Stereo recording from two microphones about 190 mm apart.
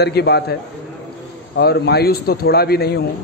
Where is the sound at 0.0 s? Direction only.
60° left (ahead or behind).